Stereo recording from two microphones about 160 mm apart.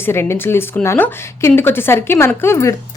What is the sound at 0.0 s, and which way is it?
A woman's voice, 15° left (ahead or behind).